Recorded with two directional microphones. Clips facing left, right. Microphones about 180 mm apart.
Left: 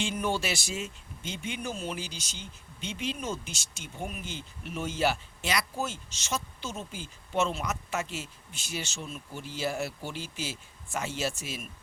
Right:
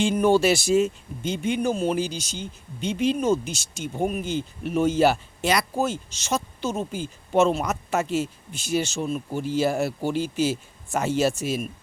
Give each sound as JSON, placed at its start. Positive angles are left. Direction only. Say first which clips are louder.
{"t": 0.0, "sound": "speech", "louder": "right 11 dB", "side_deg": -45}
{"t": 8.6, "sound": "speech", "louder": "right 13 dB", "side_deg": -40}